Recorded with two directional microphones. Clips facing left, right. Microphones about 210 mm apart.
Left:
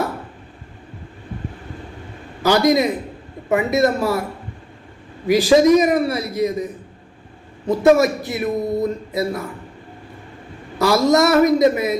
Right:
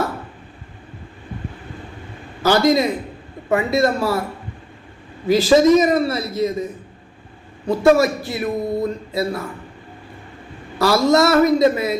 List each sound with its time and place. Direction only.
2.4 s a man's voice: 15° left (ahead or behind)
5.2 s a man's voice: 15° left (ahead or behind)
7.7 s a man's voice: 20° left (ahead or behind)
10.8 s a man's voice: 20° left (ahead or behind)